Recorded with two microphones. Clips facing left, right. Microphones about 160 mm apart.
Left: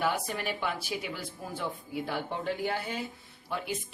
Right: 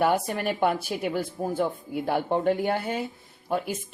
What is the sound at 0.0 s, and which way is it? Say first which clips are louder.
A woman's voice: right 7 dB; 50° right (ahead or behind).